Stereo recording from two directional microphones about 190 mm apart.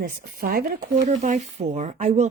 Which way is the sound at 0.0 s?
50° right (ahead or behind).